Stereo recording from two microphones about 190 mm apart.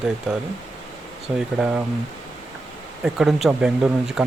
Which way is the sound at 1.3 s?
10° right (ahead or behind).